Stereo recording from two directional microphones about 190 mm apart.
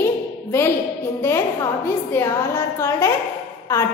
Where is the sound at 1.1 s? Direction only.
15° left (ahead or behind).